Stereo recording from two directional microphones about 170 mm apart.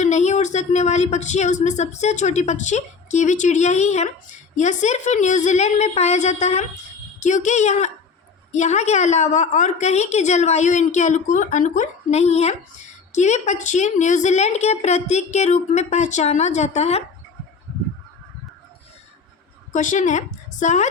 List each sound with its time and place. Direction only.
0.0 s a woman's voice: 45° left (ahead or behind)
19.7 s speech: 50° left (ahead or behind)